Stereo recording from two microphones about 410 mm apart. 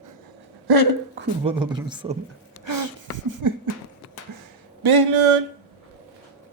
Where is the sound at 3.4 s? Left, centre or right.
Right.